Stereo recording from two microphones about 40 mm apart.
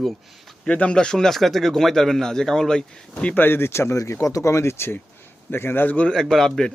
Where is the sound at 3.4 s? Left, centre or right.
Left.